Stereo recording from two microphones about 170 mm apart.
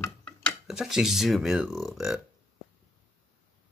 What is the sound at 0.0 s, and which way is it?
Speech, 5° left (ahead or behind).